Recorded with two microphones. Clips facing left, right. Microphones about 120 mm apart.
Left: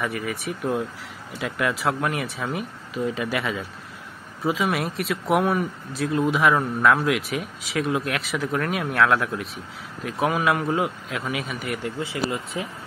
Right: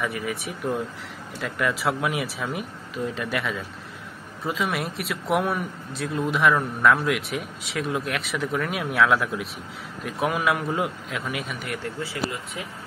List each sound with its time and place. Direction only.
0.0 s speech: centre (ahead or behind)
11.8 s speech: 20° left (ahead or behind)